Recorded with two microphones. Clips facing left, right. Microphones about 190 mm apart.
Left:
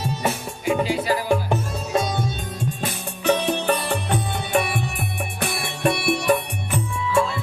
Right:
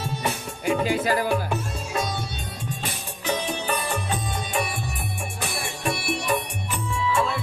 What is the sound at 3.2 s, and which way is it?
Music, 60° left (ahead or behind).